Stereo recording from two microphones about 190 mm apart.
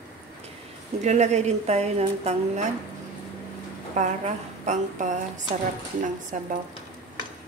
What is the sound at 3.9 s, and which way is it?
A woman's voice, 40° right (ahead or behind).